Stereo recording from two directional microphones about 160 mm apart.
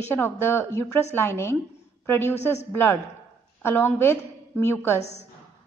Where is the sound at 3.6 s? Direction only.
15° left (ahead or behind).